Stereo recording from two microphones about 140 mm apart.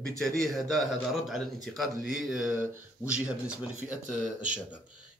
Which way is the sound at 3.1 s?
10° right (ahead or behind).